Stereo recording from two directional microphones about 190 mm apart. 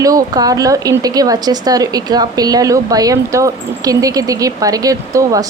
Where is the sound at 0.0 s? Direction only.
20° right (ahead or behind).